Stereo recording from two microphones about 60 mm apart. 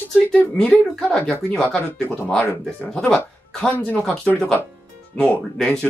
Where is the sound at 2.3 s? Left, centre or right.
Centre.